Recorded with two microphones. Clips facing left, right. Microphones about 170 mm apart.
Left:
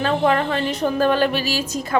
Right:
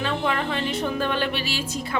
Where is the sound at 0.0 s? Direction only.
40° left (ahead or behind).